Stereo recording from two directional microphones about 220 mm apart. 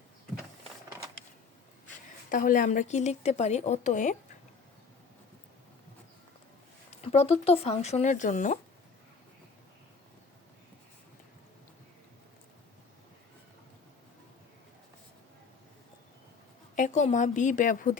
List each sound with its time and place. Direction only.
2.3 s a woman's voice: 35° left (ahead or behind)
6.9 s speech: 30° left (ahead or behind)
16.7 s a woman's voice: 35° left (ahead or behind)